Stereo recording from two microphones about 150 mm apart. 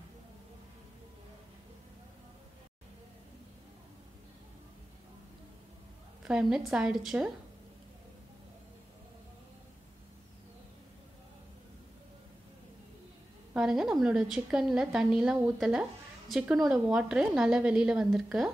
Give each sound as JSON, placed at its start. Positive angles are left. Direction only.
{"t": 6.2, "sound": "a woman's voice", "side_deg": -5}
{"t": 13.5, "sound": "a woman's voice", "side_deg": -5}